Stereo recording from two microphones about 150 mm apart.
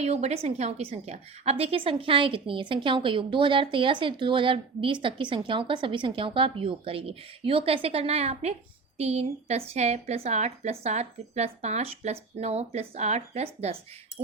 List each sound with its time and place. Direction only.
0.0 s a woman's voice: 45° right (ahead or behind)